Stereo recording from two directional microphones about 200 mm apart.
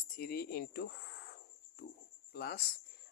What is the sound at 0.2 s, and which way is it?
Speech, 50° left (ahead or behind).